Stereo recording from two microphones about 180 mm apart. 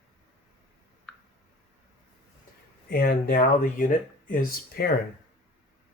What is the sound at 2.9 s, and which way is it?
Speech, 55° left (ahead or behind).